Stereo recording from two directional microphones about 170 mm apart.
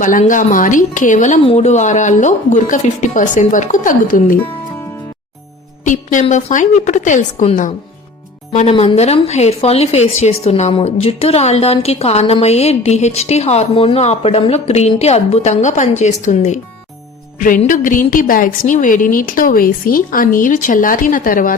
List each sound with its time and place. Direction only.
0.0 s a woman's voice: 50° left (ahead or behind)
5.8 s a woman's voice: 50° left (ahead or behind)
8.7 s speech: 35° left (ahead or behind)
17.7 s a woman's voice: 50° left (ahead or behind)